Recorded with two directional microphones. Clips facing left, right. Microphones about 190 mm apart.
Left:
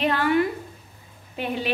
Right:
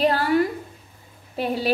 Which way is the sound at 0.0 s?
35° right (ahead or behind).